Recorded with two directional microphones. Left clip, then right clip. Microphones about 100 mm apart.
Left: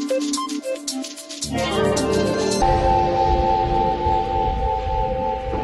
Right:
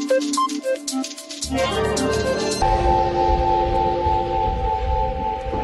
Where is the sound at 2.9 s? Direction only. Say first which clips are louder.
Left 1 dB; 25° right (ahead or behind).